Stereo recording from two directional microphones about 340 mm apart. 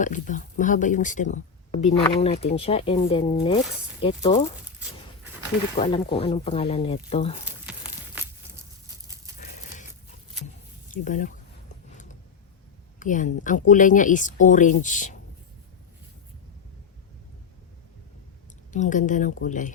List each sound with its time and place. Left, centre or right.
0.0 s speech: left
5.7 s speech: centre
7.6 s a sound: centre
10.9 s speech: left
13.0 s speech: left
18.7 s speech: left